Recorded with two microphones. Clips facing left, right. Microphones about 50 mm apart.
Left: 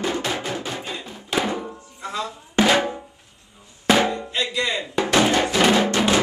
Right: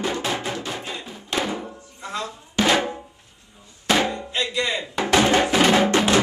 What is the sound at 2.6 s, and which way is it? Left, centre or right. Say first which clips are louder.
Drum: left 2 dB; centre.